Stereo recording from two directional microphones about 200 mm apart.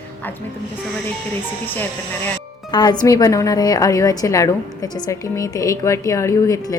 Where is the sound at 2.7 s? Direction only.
20° left (ahead or behind).